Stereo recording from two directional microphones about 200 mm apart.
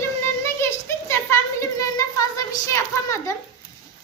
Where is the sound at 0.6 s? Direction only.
15° left (ahead or behind).